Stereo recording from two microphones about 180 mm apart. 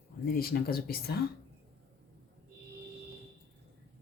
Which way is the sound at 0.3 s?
55° left (ahead or behind).